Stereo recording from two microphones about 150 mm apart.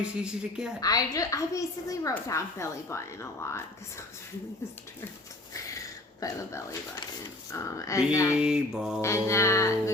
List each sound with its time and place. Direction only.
0.0 s a woman's voice: 5° right (ahead or behind)
0.8 s speech: 25° left (ahead or behind)
5.8 s a sound: 20° left (ahead or behind)
7.5 s speech: 20° left (ahead or behind)
8.4 s a woman's voice: 5° right (ahead or behind)
9.0 s speech: 20° left (ahead or behind)